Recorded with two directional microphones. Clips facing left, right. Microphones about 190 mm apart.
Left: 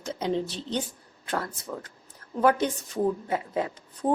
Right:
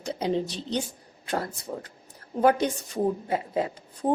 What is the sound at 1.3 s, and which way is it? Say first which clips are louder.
Speech: right 1 dB; 30° right (ahead or behind).